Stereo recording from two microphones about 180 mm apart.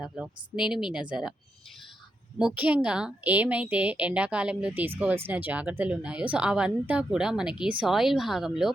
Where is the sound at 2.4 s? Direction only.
5° right (ahead or behind).